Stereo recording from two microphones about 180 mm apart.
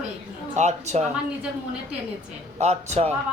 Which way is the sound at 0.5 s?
40° right (ahead or behind).